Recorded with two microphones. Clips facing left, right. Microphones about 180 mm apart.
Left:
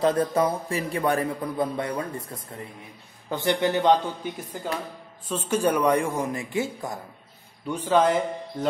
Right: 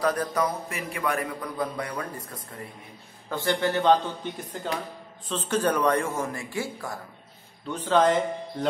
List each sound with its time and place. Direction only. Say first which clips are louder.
0.0 s a man's voice: left 4 dB; 25° left (ahead or behind); by 8.2 s 10° left (ahead or behind)